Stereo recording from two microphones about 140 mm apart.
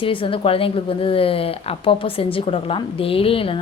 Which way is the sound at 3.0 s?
40° left (ahead or behind).